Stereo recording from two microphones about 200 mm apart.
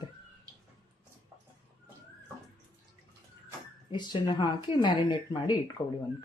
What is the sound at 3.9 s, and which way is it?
Speech, 25° left (ahead or behind).